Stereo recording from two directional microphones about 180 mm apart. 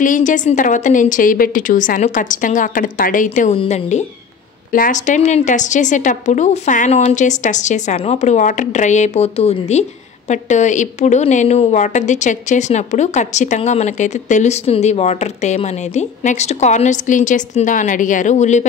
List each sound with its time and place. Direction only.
0.0 s a woman's voice: 45° left (ahead or behind)